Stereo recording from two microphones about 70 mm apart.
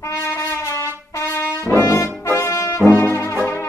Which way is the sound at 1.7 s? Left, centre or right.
Left.